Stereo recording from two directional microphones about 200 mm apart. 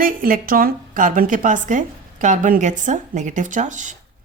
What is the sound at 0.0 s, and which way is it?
A woman's voice, 45° right (ahead or behind).